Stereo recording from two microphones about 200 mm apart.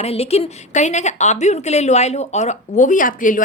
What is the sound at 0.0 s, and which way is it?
A woman's voice, 30° left (ahead or behind).